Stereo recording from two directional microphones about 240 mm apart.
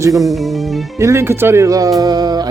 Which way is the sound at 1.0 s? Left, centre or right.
Centre.